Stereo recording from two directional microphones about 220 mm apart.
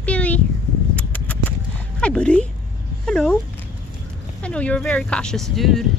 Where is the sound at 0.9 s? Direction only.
5° left (ahead or behind).